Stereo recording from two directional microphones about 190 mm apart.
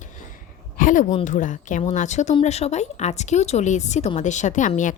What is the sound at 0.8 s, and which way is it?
A woman's voice, 45° left (ahead or behind).